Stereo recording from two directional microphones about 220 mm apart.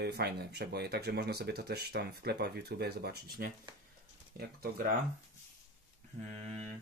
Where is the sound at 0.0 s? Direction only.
45° right (ahead or behind).